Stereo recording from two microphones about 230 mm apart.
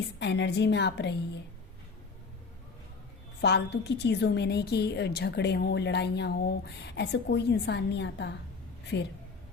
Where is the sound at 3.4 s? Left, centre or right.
Left.